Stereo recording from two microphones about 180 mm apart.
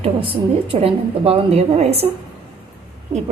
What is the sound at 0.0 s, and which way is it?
A woman's voice, 30° right (ahead or behind).